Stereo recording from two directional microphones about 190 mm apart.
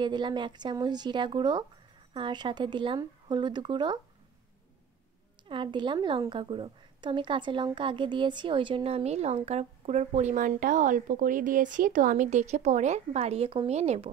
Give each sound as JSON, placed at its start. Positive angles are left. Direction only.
{"t": 0.0, "sound": "speech", "side_deg": -25}
{"t": 5.5, "sound": "a woman's voice", "side_deg": -25}